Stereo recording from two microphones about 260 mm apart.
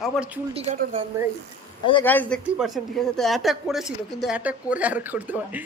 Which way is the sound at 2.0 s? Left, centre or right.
Centre.